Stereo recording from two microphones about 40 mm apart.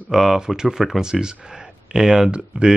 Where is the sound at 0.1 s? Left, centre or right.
Centre.